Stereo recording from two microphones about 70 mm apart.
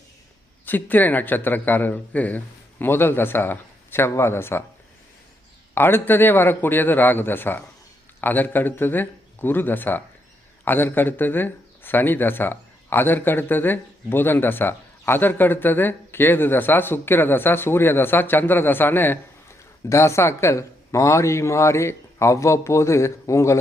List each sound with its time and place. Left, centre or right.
0.6 s speech: left
5.7 s speech: left
19.9 s speech: left